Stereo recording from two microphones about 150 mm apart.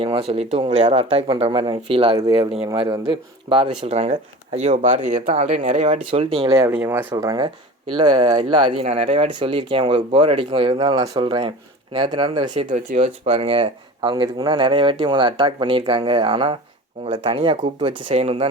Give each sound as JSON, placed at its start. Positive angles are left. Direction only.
{"t": 0.0, "sound": "speech", "side_deg": -40}
{"t": 3.1, "sound": "speech", "side_deg": -35}
{"t": 6.7, "sound": "speech", "side_deg": -15}
{"t": 7.4, "sound": "speech", "side_deg": -35}
{"t": 12.7, "sound": "speech", "side_deg": -45}